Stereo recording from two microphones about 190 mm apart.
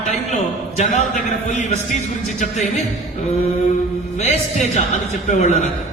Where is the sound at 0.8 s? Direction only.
40° left (ahead or behind).